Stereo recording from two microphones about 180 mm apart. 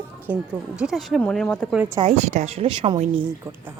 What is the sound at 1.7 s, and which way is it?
Speech, 10° right (ahead or behind).